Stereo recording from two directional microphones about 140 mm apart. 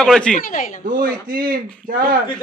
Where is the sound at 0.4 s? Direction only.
70° left (ahead or behind).